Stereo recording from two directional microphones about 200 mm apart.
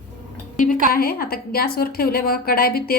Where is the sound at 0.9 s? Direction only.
50° left (ahead or behind).